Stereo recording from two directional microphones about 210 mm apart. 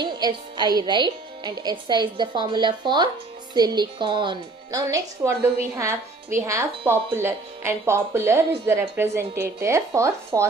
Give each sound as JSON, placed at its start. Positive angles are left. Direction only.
{"t": 0.0, "sound": "a woman's voice", "side_deg": -20}